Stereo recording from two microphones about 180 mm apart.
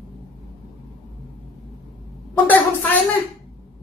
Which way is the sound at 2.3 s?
10° left (ahead or behind).